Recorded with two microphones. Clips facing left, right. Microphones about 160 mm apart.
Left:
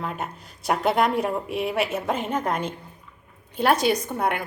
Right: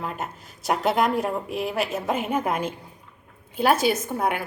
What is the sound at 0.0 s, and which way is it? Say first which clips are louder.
A woman's voice: left 1 dB; centre (ahead or behind).